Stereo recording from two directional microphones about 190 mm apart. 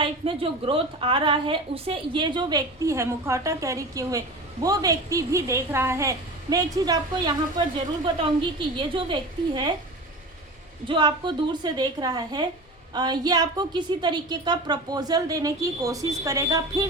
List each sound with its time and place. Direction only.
0.0 s a woman's voice: 30° right (ahead or behind)
10.8 s a woman's voice: 25° right (ahead or behind)